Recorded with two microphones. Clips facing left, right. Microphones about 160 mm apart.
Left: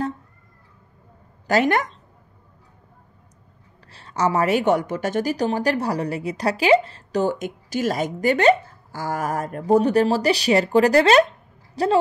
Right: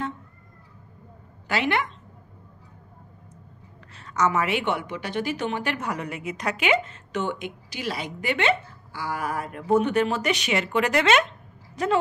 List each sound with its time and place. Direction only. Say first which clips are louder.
1.5 s speech: left 6 dB; 45° left (ahead or behind)
3.9 s a woman's voice: left 2 dB; 30° left (ahead or behind)